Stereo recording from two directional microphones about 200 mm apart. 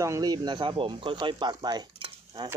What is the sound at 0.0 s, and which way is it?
Speech, 15° right (ahead or behind).